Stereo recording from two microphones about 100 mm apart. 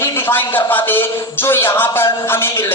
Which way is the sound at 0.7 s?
20° left (ahead or behind).